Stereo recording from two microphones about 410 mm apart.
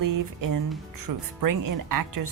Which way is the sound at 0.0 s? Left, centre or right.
Right.